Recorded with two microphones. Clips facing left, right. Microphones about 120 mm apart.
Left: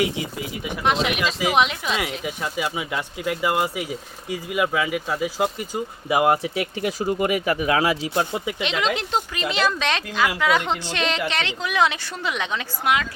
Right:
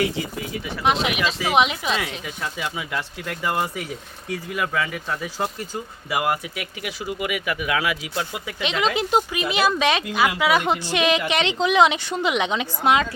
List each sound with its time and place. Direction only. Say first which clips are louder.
0.9 s speech: even; centre (ahead or behind)
2.2 s speech: left 3 dB; 10° left (ahead or behind)
6.1 s speech: left 5 dB; 30° left (ahead or behind)
8.3 s speech: left 5 dB; 20° left (ahead or behind)
8.6 s speech: right 4 dB; centre (ahead or behind); by 13.1 s 30° right (ahead or behind)